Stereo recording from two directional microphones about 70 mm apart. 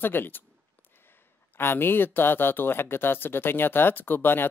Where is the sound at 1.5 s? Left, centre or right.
Left.